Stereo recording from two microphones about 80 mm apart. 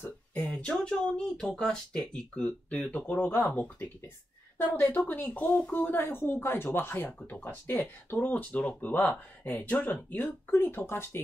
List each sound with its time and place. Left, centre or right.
0.0 s speech: left
4.9 s speech: left